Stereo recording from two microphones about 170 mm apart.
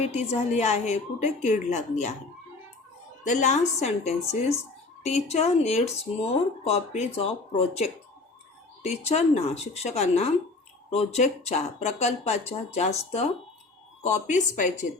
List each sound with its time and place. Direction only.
0.0 s a woman's voice: 40° left (ahead or behind)
3.2 s a woman's voice: 45° left (ahead or behind)